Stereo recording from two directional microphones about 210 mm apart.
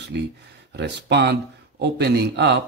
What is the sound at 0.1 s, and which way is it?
Speech, 55° right (ahead or behind).